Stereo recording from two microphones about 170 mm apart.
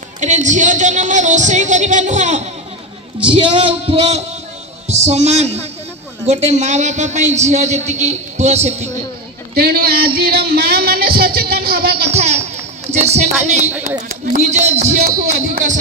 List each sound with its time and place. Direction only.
0.2 s music: 45° right (ahead or behind)
3.3 s a man's voice: 30° right (ahead or behind)
9.6 s speech: 65° right (ahead or behind)
12.2 s a sound: 40° right (ahead or behind)
12.9 s speech: 40° right (ahead or behind)
14.3 s a man's voice: 45° right (ahead or behind)